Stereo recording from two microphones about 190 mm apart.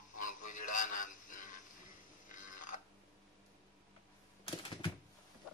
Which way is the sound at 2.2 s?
45° left (ahead or behind).